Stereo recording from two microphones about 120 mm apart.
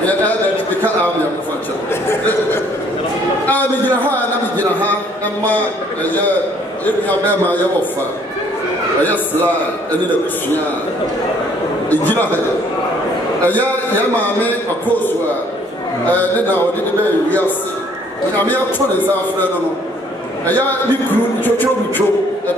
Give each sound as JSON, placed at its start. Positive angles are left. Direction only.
{"t": 2.0, "sound": "speech", "side_deg": 20}
{"t": 3.4, "sound": "a sound", "side_deg": 15}
{"t": 6.0, "sound": "a man's voice", "side_deg": 15}
{"t": 11.9, "sound": "a man's voice", "side_deg": 15}
{"t": 13.5, "sound": "a man's voice", "side_deg": 15}
{"t": 16.1, "sound": "a man's voice", "side_deg": 15}
{"t": 20.4, "sound": "a man's voice", "side_deg": 15}